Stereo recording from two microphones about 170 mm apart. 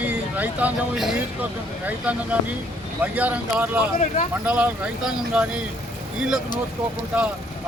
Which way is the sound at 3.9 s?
45° left (ahead or behind).